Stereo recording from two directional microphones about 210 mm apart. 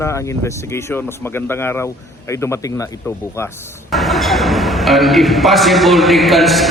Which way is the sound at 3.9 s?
Centre (ahead or behind).